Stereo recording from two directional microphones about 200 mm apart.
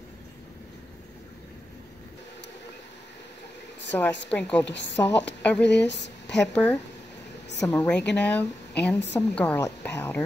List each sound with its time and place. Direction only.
3.9 s a woman's voice: 10° left (ahead or behind)
5.7 s speech: 60° left (ahead or behind)
6.3 s a woman's voice: 5° left (ahead or behind)